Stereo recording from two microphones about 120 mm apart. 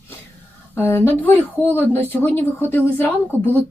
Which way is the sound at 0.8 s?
20° left (ahead or behind).